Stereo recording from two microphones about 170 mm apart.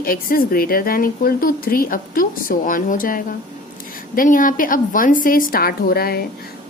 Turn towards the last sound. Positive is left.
turn(degrees=65)  # may be behind; listen again after turning